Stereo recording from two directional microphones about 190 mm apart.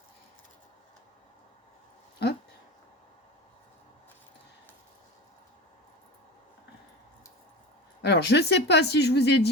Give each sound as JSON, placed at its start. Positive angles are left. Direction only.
{"t": 8.0, "sound": "speech", "side_deg": 65}